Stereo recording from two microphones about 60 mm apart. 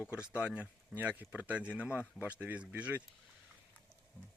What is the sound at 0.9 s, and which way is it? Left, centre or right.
A man's voice, right.